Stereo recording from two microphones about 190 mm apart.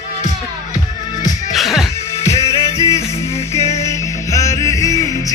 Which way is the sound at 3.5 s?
15° left (ahead or behind).